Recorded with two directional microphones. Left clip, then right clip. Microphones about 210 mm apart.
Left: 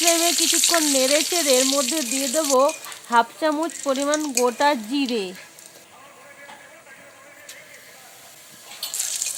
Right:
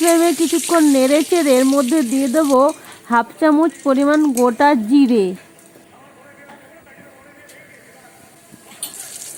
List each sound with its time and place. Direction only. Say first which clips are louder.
0.0 s speech: right 5 dB; 15° right (ahead or behind)